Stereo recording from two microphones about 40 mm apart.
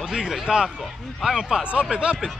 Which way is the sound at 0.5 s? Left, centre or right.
Right.